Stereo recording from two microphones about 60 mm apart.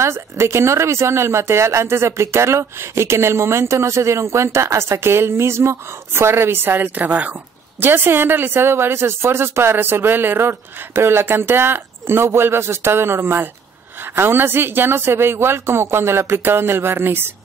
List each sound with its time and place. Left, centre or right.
0.0 s speech: right
7.8 s speech: right